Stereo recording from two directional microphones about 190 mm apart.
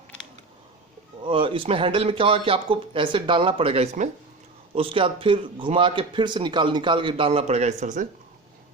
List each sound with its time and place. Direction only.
1.2 s a man's voice: 30° right (ahead or behind)